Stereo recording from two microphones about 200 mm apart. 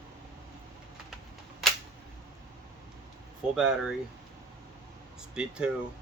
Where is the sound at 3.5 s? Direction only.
5° right (ahead or behind).